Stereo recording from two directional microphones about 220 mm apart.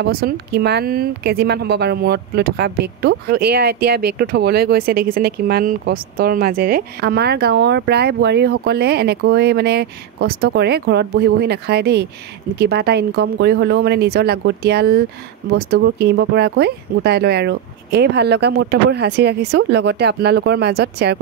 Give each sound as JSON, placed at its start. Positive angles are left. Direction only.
{"t": 0.0, "sound": "speech", "side_deg": -45}